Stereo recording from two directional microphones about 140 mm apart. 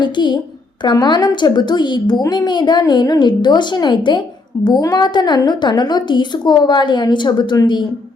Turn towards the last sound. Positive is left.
turn(degrees=35)  # may be behind; listen again after turning